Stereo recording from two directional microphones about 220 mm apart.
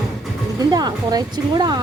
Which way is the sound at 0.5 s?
15° right (ahead or behind).